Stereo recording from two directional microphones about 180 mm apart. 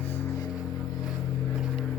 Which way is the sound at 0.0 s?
10° left (ahead or behind).